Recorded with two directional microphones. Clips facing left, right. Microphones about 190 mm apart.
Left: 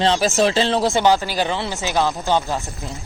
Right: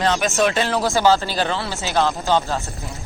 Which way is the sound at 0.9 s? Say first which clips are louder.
Even; 15° left (ahead or behind).